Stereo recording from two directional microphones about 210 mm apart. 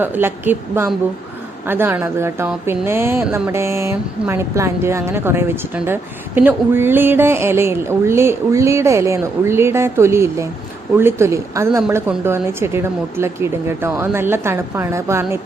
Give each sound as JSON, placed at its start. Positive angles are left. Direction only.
{"t": 0.0, "sound": "speech", "side_deg": -10}